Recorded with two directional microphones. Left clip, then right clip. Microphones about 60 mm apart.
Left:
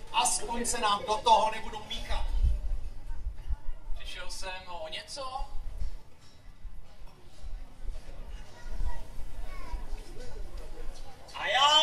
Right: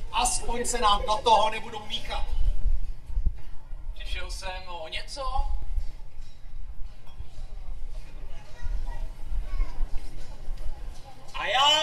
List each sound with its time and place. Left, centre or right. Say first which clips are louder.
0.1 s a sound: right 2 dB; right
0.5 s speech: right 5 dB; right
4.0 s speech: right 3 dB; right
11.3 s speech: right 2 dB; right